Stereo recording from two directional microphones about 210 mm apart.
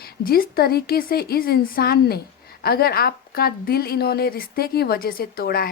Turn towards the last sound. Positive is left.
turn(degrees=45)  # may be behind; listen again after turning